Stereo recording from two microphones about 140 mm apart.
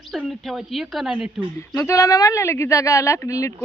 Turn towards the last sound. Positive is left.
turn(degrees=25)  # may be behind; listen again after turning